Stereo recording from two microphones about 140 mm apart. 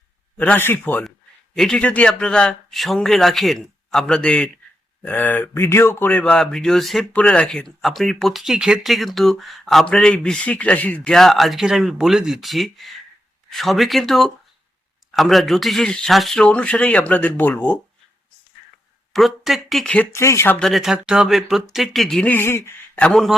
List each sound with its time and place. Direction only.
0.3 s speech: 10° left (ahead or behind)
1.5 s speech: 5° left (ahead or behind)
19.1 s speech: centre (ahead or behind)
20.1 s speech: 20° left (ahead or behind)
20.6 s speech: centre (ahead or behind)